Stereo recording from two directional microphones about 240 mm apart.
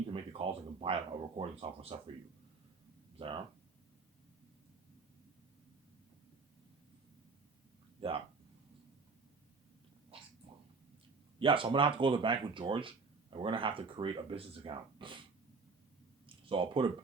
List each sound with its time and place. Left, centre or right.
0.1 s speech: right
3.2 s speech: right
8.0 s speech: right
11.3 s speech: right
16.2 s a sound: right